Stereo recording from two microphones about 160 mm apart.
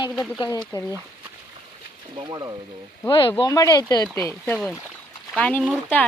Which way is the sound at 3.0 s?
30° left (ahead or behind).